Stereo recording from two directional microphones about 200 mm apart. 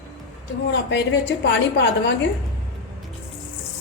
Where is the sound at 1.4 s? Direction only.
60° left (ahead or behind).